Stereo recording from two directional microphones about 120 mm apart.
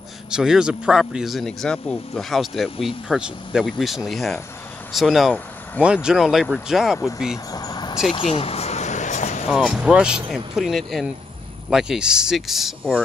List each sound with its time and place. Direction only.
0.3 s speech: 5° right (ahead or behind)
7.5 s vehicle: 35° left (ahead or behind)
8.1 s a sound: 55° left (ahead or behind); by 9.5 s 80° left
9.5 s speech: 5° right (ahead or behind)